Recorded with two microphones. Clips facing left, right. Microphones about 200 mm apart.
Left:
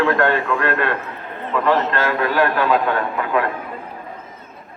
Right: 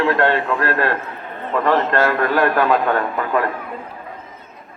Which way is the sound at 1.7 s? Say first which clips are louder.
Right 2 dB; 50° right (ahead or behind).